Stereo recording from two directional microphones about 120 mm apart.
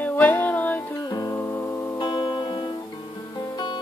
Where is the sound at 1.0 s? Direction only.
30° left (ahead or behind).